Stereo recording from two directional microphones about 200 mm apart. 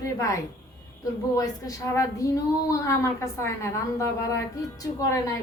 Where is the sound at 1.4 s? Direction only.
15° left (ahead or behind).